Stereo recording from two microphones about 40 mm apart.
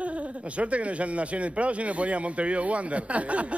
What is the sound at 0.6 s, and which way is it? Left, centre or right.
Speech, right.